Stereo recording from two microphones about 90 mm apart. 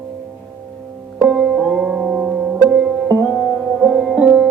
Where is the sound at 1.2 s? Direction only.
15° right (ahead or behind).